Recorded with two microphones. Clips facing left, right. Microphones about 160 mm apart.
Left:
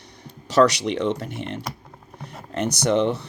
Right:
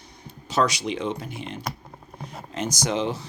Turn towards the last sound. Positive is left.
turn(degrees=65)  # may be behind; listen again after turning